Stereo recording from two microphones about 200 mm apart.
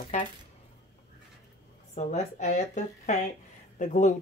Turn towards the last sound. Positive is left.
turn(degrees=40)  # may be behind; listen again after turning